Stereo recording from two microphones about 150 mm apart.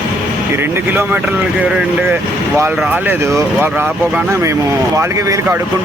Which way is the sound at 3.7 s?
10° right (ahead or behind).